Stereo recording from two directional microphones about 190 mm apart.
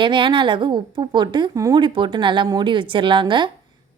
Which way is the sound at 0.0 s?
25° right (ahead or behind).